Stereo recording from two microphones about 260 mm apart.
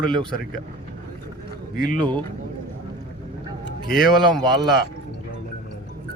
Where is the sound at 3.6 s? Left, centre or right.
Left.